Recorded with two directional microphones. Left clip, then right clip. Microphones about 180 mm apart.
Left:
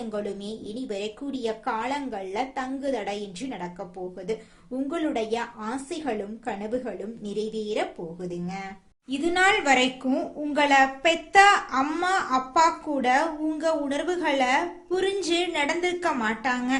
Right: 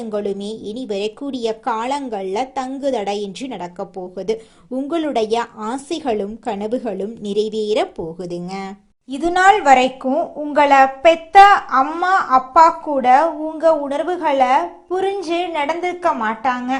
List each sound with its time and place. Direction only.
0.1 s speech: 35° right (ahead or behind)
4.9 s speech: 40° right (ahead or behind)
9.0 s a woman's voice: 30° right (ahead or behind); by 16.6 s 15° right (ahead or behind)